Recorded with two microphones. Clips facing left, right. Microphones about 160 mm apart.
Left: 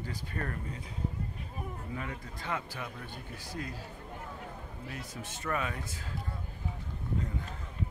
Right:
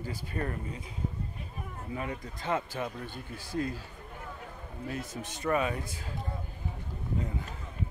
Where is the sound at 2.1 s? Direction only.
25° right (ahead or behind).